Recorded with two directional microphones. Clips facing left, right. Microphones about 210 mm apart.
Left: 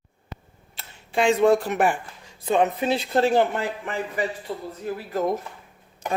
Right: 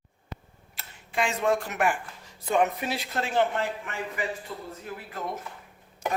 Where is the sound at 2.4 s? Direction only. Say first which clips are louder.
Left 4 dB; 20° left (ahead or behind).